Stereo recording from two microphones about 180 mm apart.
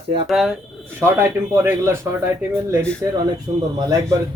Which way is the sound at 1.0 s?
15° right (ahead or behind).